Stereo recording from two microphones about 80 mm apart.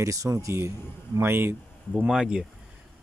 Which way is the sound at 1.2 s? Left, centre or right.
Right.